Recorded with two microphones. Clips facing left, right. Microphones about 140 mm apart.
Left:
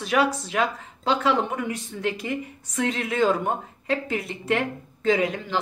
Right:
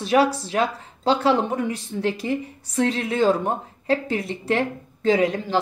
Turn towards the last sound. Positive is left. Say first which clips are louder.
# right 3 dB
turn(degrees=-35)  # may be behind; listen again after turning